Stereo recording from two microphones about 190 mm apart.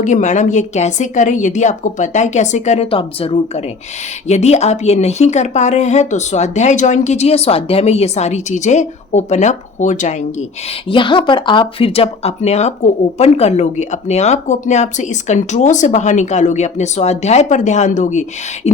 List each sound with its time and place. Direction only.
0.0 s speech: 40° left (ahead or behind)
10.8 s speech: 25° left (ahead or behind)